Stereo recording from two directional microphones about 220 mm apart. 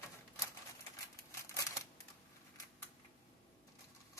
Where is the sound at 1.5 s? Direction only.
15° left (ahead or behind).